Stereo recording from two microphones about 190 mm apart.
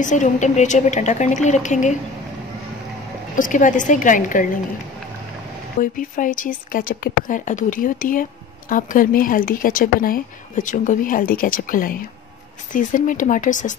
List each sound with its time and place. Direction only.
0.0 s a woman's voice: 40° left (ahead or behind)
3.3 s speech: 45° left (ahead or behind)
5.8 s speech: 45° left (ahead or behind)